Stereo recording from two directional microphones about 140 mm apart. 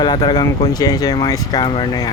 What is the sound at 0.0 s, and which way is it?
Speech, 35° left (ahead or behind).